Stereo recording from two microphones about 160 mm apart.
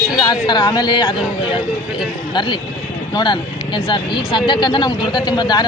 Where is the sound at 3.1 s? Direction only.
30° left (ahead or behind).